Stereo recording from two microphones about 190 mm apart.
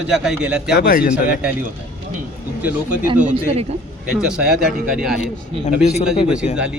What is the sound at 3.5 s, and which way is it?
Speech, 35° right (ahead or behind).